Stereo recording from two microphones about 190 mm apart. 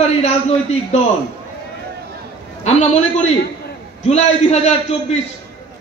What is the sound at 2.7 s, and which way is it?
A man's voice, 35° left (ahead or behind).